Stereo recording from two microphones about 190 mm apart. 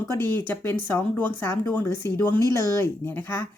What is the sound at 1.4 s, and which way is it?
Speech, 10° left (ahead or behind).